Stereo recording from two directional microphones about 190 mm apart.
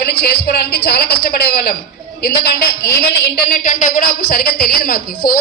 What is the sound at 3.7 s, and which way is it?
A woman's voice, 45° left (ahead or behind).